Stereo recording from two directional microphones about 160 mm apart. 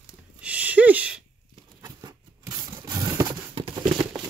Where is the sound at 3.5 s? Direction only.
35° right (ahead or behind).